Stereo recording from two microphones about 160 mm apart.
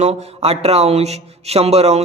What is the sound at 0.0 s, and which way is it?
Speech, 40° right (ahead or behind).